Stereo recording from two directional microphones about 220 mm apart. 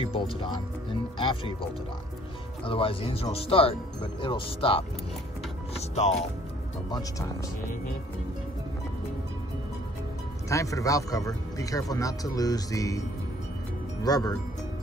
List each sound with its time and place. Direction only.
0.0 s speech: 25° left (ahead or behind)
2.6 s speech: 25° left (ahead or behind)
5.8 s music: 30° left (ahead or behind)
6.9 s speech: 15° left (ahead or behind)
10.5 s speech: 15° left (ahead or behind)
14.0 s speech: 15° left (ahead or behind)